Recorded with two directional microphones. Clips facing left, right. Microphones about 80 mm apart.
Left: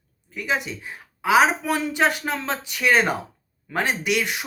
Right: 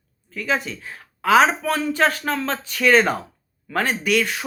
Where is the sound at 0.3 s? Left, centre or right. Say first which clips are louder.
Right 2 dB; centre.